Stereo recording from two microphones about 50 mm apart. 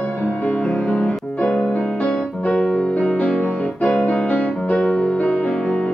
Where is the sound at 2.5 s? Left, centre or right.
Left.